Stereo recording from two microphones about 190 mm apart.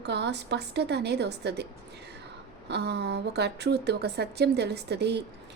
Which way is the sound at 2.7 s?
60° right (ahead or behind).